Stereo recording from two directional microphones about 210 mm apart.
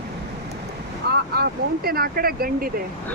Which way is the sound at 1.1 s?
50° right (ahead or behind).